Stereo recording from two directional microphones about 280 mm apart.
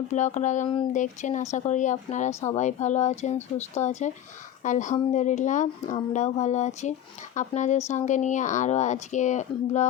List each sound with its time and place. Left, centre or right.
0.1 s speech: left